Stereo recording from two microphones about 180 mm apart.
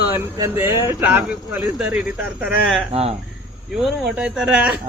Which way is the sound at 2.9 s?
35° right (ahead or behind).